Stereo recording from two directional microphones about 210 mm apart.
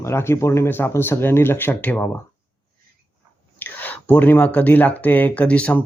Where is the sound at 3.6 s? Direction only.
10° left (ahead or behind).